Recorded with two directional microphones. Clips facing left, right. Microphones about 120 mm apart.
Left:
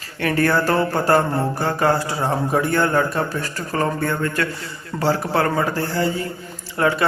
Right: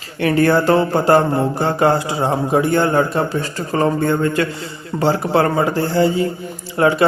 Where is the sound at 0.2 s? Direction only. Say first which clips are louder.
Right 4 dB; 25° right (ahead or behind).